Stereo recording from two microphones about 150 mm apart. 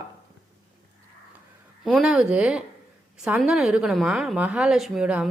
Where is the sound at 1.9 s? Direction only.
5° right (ahead or behind).